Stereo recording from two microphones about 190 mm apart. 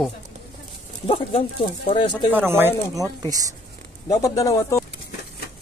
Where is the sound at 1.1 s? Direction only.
30° left (ahead or behind).